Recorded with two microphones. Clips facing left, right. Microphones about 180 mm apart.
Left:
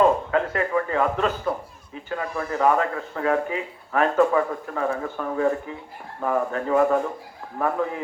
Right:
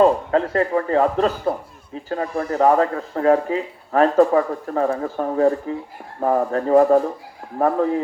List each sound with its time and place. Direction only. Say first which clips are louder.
0.0 s speech: right 4 dB; 35° right (ahead or behind)